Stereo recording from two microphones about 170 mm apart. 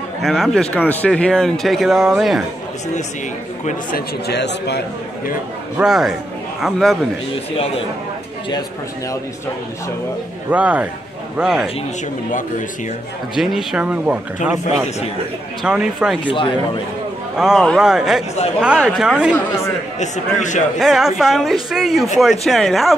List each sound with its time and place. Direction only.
0.2 s speech: centre (ahead or behind)
4.3 s a man's voice: 80° left
5.8 s speech: centre (ahead or behind)
7.5 s a man's voice: 35° left (ahead or behind)
10.5 s speech: 10° right (ahead or behind)
12.3 s a man's voice: 50° left (ahead or behind)
13.4 s speech: centre (ahead or behind)
15.6 s speech: 5° right (ahead or behind)
17.4 s speech: centre (ahead or behind)
20.0 s a man's voice: 45° left (ahead or behind)
20.8 s speech: centre (ahead or behind)